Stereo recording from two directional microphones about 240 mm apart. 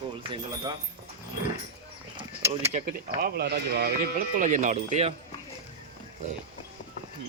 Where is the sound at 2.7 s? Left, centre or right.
Right.